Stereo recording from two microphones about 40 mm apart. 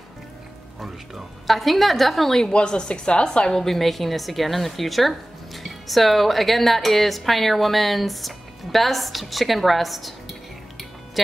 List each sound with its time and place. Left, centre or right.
1.5 s speech: centre
2.4 s a woman's voice: left
3.6 s speech: centre